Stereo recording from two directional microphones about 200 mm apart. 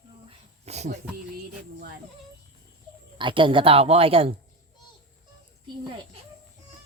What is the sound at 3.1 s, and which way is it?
A woman's voice, 25° right (ahead or behind).